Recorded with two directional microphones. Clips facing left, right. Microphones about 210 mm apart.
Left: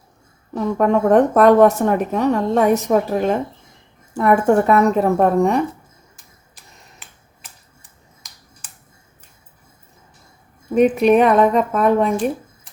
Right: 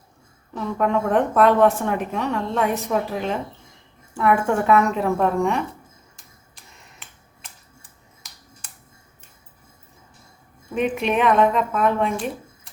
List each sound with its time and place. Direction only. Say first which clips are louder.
0.5 s a woman's voice: left 5 dB; 45° left (ahead or behind)
10.8 s speech: left 9 dB; 40° left (ahead or behind)